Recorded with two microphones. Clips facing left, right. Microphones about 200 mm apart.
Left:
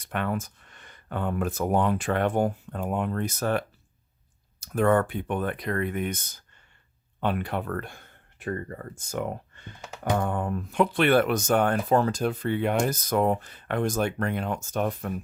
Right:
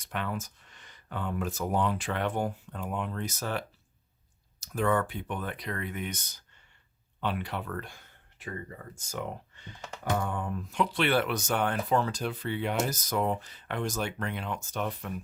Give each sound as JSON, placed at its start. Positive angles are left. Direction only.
{"t": 0.0, "sound": "speech", "side_deg": 55}
{"t": 4.6, "sound": "speech", "side_deg": 55}